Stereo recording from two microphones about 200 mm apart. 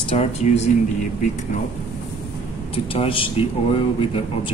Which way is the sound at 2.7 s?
25° left (ahead or behind).